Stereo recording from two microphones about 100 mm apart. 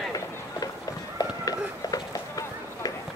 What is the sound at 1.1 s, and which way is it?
Run, 40° left (ahead or behind).